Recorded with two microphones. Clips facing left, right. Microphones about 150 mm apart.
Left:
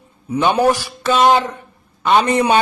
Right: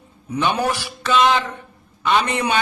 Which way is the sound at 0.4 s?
45° left (ahead or behind).